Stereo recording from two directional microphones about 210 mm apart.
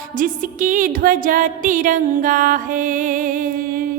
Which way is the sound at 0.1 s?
40° right (ahead or behind).